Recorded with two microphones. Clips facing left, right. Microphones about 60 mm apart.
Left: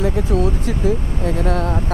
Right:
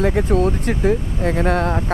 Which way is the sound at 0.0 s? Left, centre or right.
Right.